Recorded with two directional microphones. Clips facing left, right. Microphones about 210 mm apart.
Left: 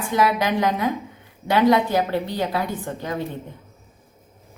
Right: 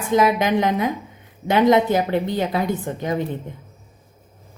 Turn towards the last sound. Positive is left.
turn(degrees=-20)  # may be behind; listen again after turning